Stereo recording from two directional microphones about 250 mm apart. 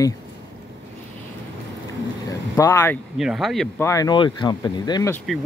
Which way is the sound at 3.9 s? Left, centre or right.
Centre.